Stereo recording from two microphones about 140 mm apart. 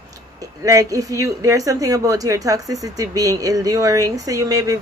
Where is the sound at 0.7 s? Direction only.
25° right (ahead or behind).